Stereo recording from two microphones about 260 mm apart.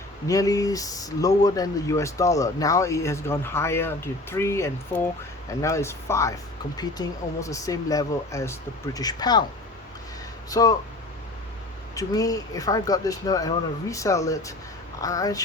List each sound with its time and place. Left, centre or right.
0.3 s speech: centre
10.5 s speech: centre
11.9 s speech: centre